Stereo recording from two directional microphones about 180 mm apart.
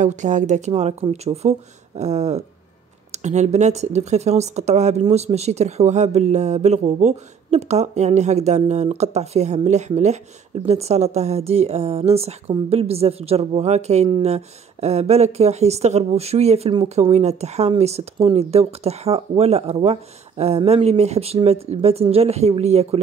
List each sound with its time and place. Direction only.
0.0 s speech: 40° right (ahead or behind)